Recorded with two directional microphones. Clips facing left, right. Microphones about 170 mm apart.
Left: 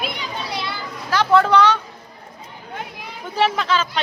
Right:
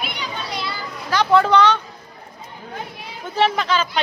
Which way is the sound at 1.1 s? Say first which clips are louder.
Even; centre (ahead or behind).